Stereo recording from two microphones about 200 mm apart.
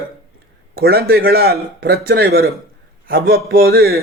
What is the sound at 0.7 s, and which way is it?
A man's voice, 50° right (ahead or behind).